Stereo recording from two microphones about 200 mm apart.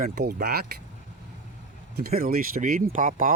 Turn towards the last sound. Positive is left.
turn(degrees=-40)  # may be behind; listen again after turning